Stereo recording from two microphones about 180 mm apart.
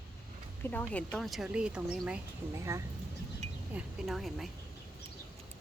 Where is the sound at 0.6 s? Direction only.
10° left (ahead or behind); by 2.8 s 15° right (ahead or behind).